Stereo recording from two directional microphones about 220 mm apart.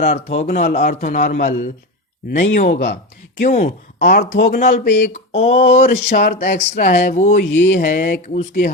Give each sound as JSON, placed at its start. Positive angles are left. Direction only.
{"t": 0.0, "sound": "a man's voice", "side_deg": 35}
{"t": 5.1, "sound": "a man's voice", "side_deg": 30}